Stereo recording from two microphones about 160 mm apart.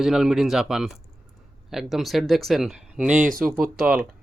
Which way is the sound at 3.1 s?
55° right (ahead or behind).